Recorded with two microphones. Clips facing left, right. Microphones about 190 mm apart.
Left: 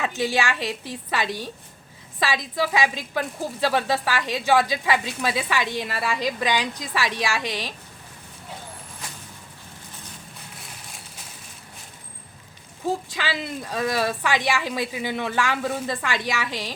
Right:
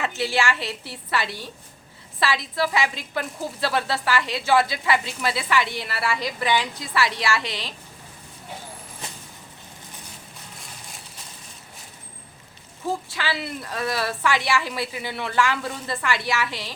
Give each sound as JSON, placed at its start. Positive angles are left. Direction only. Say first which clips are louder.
{"t": 0.1, "sound": "a woman's voice", "louder": "even", "side_deg": 15}
{"t": 13.1, "sound": "a woman's voice", "louder": "even", "side_deg": 15}